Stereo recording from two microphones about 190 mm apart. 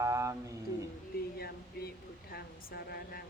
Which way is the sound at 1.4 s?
55° left (ahead or behind).